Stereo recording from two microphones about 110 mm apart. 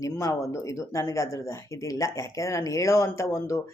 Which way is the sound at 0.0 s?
30° left (ahead or behind).